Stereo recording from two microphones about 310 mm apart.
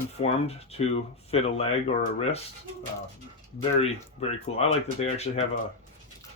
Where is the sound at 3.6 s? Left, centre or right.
Centre.